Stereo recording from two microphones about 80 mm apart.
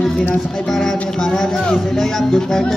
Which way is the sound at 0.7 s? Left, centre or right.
Centre.